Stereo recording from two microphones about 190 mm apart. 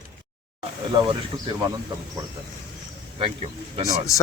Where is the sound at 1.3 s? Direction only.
20° right (ahead or behind).